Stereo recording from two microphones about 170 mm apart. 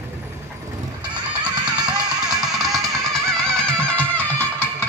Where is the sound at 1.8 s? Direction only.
5° right (ahead or behind).